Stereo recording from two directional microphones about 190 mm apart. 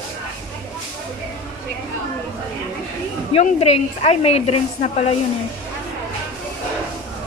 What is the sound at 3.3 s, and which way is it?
A woman's voice, 35° left (ahead or behind).